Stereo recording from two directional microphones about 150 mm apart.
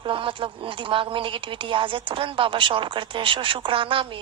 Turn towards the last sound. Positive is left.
turn(degrees=-35)  # may be behind; listen again after turning